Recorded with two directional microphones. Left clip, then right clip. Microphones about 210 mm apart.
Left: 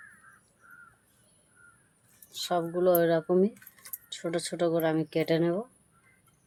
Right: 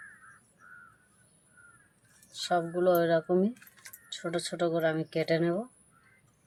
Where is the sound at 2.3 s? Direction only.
20° left (ahead or behind).